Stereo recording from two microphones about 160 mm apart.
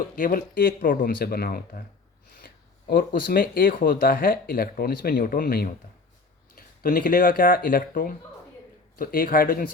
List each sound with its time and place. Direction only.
0.2 s speech: 60° left (ahead or behind)
6.8 s speech: 65° left (ahead or behind)